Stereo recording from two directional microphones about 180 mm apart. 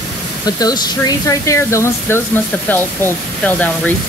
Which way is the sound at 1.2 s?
15° left (ahead or behind).